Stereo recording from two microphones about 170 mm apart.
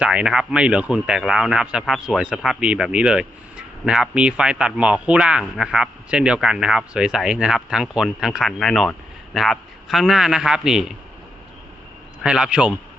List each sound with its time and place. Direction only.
0.0 s a man's voice: 5° right (ahead or behind)
12.2 s a man's voice: 5° right (ahead or behind)